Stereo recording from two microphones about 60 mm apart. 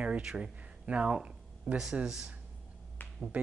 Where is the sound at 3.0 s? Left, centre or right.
Left.